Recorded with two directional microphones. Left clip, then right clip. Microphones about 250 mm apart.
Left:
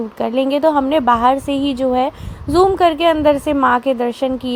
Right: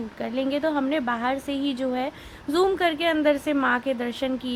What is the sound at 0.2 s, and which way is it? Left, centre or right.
A woman's voice, left.